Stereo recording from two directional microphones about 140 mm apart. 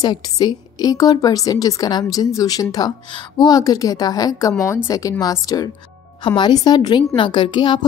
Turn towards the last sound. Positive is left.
turn(degrees=35)  # may be behind; listen again after turning